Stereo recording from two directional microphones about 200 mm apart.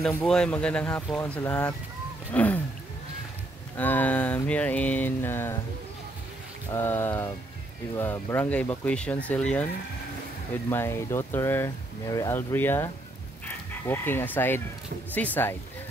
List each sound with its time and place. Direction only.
0.0 s speech: 5° left (ahead or behind)
2.3 s a sound: 10° left (ahead or behind)
3.7 s speech: 10° left (ahead or behind)
6.7 s speech: 10° left (ahead or behind)
10.7 s speech: 10° left (ahead or behind)